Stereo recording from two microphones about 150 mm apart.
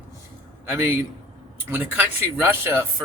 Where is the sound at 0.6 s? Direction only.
15° right (ahead or behind).